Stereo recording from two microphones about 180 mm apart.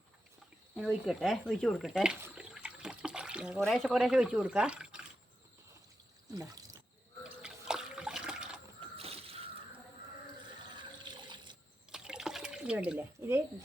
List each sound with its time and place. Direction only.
0.8 s speech: centre (ahead or behind)
6.3 s speech: 20° right (ahead or behind)
7.3 s water: 5° right (ahead or behind)
9.0 s a sound: 35° right (ahead or behind)
10.8 s water: 25° right (ahead or behind)
11.9 s water: 5° right (ahead or behind)